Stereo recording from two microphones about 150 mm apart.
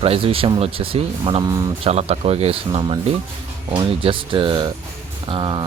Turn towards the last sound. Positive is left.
turn(degrees=-30)  # may be behind; listen again after turning